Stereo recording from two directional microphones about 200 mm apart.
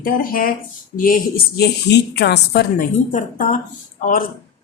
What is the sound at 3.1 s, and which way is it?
Speech, 40° left (ahead or behind).